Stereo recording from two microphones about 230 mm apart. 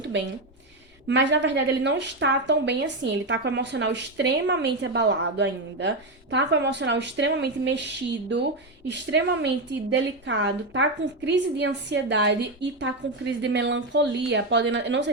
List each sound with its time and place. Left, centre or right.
1.0 s a woman's voice: right